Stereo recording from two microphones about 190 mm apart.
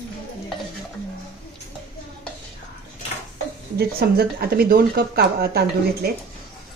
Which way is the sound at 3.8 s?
55° right (ahead or behind).